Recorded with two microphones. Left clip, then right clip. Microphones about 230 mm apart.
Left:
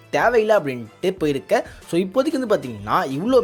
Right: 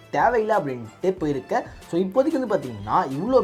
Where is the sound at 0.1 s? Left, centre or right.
Left.